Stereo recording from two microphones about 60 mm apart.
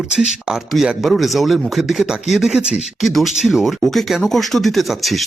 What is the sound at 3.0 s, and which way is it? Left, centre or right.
Speech, centre.